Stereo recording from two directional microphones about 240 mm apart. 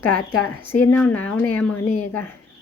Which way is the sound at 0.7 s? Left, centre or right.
Centre.